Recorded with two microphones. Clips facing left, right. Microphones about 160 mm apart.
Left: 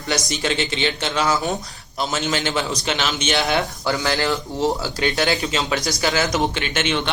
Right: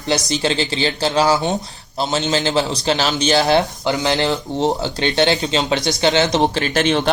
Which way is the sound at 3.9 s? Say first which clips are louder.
Right 1 dB; 20° right (ahead or behind).